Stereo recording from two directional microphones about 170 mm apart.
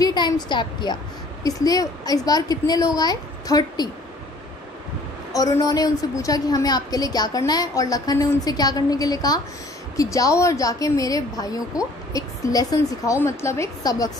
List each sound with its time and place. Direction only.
0.0 s a woman's voice: 25° left (ahead or behind)
5.3 s a woman's voice: 20° left (ahead or behind)